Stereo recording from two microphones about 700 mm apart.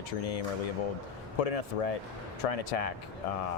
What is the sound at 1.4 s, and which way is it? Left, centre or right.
Speech, left.